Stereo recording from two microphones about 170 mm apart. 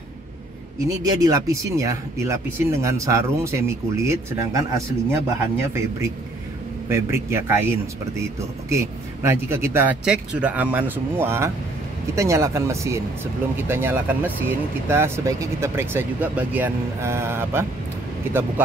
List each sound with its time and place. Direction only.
0.8 s speech: 20° right (ahead or behind)
6.9 s speech: 15° right (ahead or behind)